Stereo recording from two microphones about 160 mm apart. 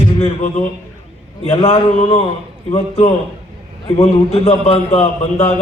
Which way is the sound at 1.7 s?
45° left (ahead or behind).